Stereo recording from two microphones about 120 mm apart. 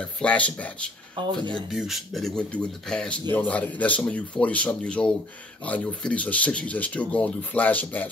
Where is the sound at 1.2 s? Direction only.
40° right (ahead or behind).